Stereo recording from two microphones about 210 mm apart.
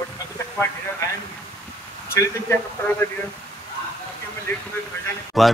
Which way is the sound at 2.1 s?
10° left (ahead or behind).